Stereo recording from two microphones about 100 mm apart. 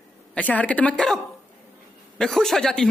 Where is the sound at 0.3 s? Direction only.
15° left (ahead or behind).